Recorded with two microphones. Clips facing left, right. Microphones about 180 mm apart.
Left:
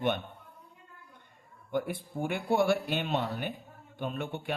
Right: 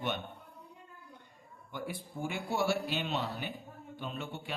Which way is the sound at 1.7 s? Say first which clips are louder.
Left 8 dB; 55° left (ahead or behind).